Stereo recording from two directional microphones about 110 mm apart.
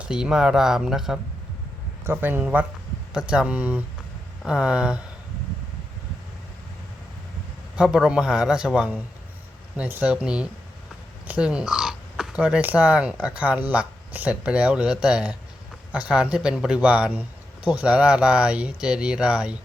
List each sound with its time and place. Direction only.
0.0 s speech: 5° right (ahead or behind)
2.0 s speech: 20° right (ahead or behind)
7.8 s speech: 5° right (ahead or behind)